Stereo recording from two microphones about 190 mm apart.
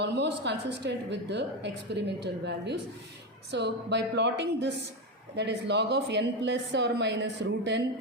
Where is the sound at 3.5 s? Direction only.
65° right (ahead or behind).